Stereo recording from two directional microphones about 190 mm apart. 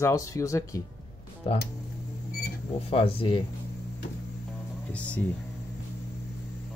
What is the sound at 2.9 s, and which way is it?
Speech, 30° left (ahead or behind).